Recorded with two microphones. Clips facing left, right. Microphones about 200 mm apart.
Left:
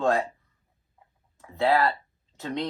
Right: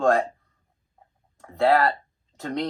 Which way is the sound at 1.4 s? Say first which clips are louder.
Right 3 dB; 45° right (ahead or behind).